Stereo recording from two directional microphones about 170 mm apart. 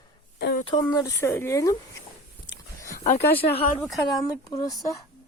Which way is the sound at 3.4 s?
50° left (ahead or behind).